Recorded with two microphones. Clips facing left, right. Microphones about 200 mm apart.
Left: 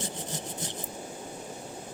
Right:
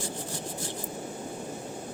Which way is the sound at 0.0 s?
20° left (ahead or behind).